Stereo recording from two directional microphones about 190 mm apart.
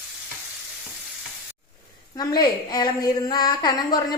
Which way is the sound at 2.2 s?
20° left (ahead or behind).